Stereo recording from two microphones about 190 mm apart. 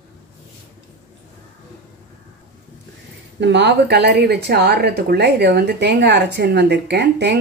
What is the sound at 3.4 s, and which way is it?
A woman's voice, 65° right (ahead or behind).